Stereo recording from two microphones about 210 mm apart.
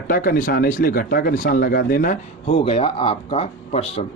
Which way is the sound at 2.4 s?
25° left (ahead or behind).